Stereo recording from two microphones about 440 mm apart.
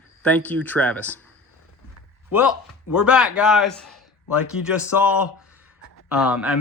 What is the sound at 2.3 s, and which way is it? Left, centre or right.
A man's voice, centre.